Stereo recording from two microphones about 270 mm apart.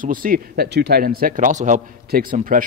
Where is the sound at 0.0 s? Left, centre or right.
Right.